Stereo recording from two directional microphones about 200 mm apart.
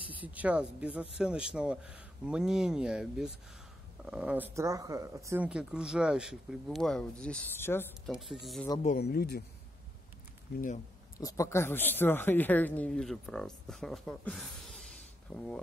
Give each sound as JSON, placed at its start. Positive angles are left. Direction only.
{"t": 0.1, "sound": "speech", "side_deg": -10}
{"t": 8.1, "sound": "speech", "side_deg": 0}
{"t": 8.8, "sound": "speech", "side_deg": 50}
{"t": 11.1, "sound": "speech", "side_deg": 15}